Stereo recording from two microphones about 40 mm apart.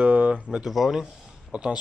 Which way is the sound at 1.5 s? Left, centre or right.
Right.